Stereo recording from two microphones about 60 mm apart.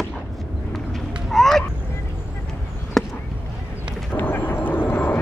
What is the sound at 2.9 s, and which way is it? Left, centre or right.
Chop, centre.